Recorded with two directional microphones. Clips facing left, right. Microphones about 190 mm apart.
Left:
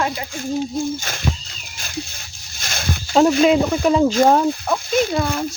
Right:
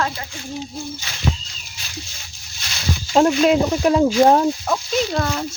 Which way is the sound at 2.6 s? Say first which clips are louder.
Even; 50° left (ahead or behind).